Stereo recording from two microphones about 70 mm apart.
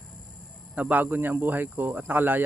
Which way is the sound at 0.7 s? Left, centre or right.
Right.